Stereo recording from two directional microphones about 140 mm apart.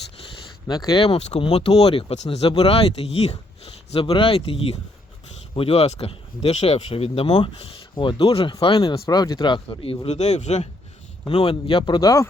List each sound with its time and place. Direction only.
0.9 s speech: 45° left (ahead or behind)
9.0 s speech: 30° left (ahead or behind); by 10.7 s 55° left (ahead or behind)
11.3 s speech: 40° left (ahead or behind); by 12.3 s 25° left (ahead or behind)